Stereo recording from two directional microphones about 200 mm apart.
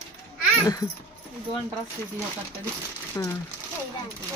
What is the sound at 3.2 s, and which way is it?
Speech, 15° left (ahead or behind).